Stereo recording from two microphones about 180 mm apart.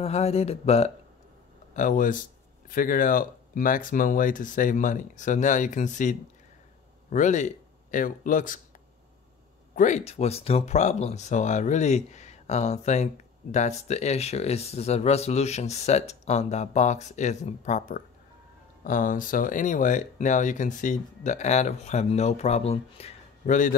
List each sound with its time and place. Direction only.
0.0 s speech: 35° left (ahead or behind)
1.7 s speech: 45° left (ahead or behind)
9.8 s speech: 40° left (ahead or behind)